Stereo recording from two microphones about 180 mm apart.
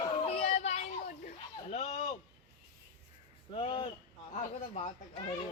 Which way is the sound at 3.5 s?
30° left (ahead or behind).